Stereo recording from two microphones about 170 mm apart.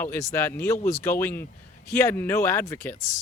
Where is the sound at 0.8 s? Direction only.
45° left (ahead or behind).